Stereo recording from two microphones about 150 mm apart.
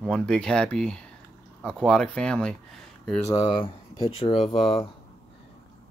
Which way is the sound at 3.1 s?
20° left (ahead or behind).